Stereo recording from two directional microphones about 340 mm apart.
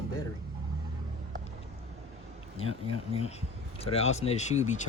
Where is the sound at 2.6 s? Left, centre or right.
Centre.